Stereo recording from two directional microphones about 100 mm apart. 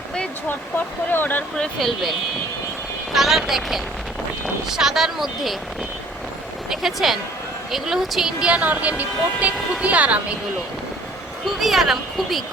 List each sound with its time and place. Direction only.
1.1 s speech: 20° left (ahead or behind)
1.5 s speech: 5° left (ahead or behind)
6.7 s speech: centre (ahead or behind)
11.6 s speech: centre (ahead or behind)